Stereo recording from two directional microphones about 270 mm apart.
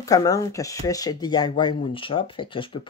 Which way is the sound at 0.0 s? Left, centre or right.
Centre.